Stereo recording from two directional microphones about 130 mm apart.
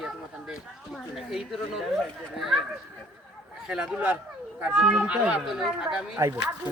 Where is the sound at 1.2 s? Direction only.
Centre (ahead or behind).